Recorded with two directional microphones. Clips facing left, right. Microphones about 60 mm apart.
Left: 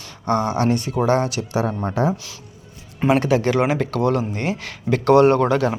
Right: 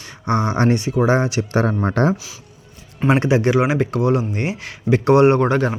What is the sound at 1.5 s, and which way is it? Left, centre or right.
Speech, right.